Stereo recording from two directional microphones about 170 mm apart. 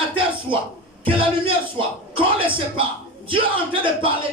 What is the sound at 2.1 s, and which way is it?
Speech, 30° right (ahead or behind).